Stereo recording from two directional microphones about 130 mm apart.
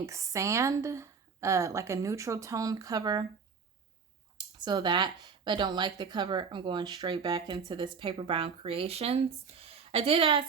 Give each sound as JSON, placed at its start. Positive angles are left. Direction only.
{"t": 0.0, "sound": "a woman's voice", "side_deg": -25}
{"t": 4.4, "sound": "speech", "side_deg": -35}